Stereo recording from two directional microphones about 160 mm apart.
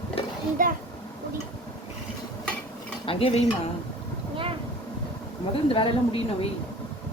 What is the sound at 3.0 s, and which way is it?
Stir, 35° left (ahead or behind).